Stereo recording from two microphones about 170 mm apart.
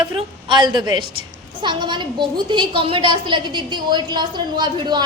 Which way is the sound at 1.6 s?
25° right (ahead or behind).